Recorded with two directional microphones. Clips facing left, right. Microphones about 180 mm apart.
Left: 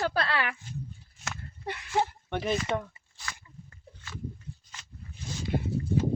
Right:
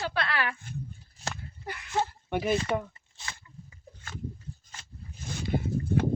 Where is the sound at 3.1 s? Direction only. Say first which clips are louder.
Left 1 dB; 25° right (ahead or behind).